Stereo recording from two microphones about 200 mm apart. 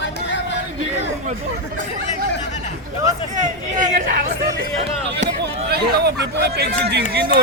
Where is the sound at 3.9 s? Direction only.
40° right (ahead or behind).